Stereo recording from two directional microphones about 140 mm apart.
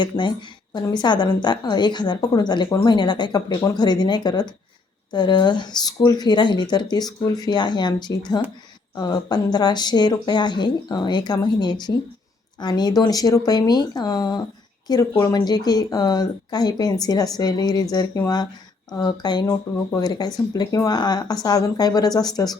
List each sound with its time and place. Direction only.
0.0 s a woman's voice: 35° left (ahead or behind)